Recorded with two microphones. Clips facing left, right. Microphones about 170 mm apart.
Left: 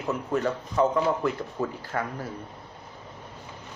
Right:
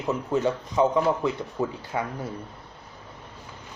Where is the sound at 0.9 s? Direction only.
5° right (ahead or behind).